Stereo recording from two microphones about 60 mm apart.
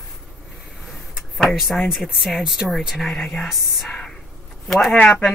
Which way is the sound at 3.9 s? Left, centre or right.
Centre.